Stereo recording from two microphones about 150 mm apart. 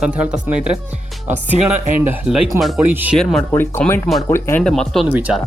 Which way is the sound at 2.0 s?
10° right (ahead or behind).